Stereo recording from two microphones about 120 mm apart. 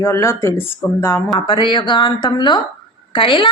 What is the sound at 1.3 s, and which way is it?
A woman's voice, 40° left (ahead or behind).